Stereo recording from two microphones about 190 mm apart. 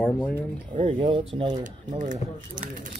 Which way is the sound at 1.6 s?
40° right (ahead or behind).